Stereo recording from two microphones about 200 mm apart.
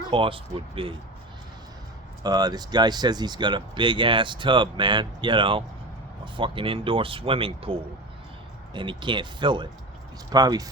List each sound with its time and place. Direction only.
0.1 s speech: 25° right (ahead or behind)
2.2 s speech: 20° right (ahead or behind)